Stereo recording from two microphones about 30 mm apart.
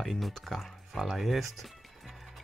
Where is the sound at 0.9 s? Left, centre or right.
Centre.